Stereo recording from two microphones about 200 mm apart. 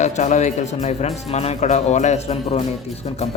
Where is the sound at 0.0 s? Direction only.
35° left (ahead or behind).